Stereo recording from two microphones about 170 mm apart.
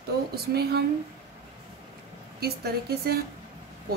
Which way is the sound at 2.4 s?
65° right (ahead or behind).